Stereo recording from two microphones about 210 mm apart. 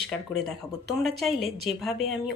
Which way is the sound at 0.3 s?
Centre (ahead or behind).